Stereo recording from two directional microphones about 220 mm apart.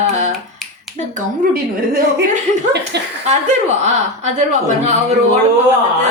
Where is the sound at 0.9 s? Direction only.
40° right (ahead or behind).